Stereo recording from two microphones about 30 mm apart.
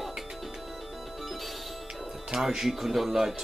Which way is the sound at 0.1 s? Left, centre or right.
Centre.